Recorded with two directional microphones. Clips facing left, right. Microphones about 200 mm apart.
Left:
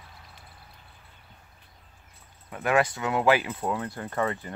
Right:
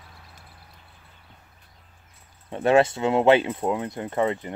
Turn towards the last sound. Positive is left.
turn(degrees=-20)  # may be behind; listen again after turning